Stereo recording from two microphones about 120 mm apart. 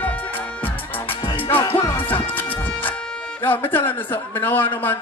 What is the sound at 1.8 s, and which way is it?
Music, 15° left (ahead or behind).